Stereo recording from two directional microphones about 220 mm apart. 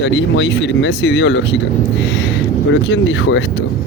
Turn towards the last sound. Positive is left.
turn(degrees=60)  # may be behind; listen again after turning